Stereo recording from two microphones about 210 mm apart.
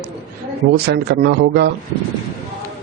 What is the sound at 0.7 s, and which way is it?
Speech, 50° right (ahead or behind).